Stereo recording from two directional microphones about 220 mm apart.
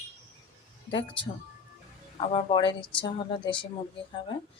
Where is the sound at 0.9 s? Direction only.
20° left (ahead or behind).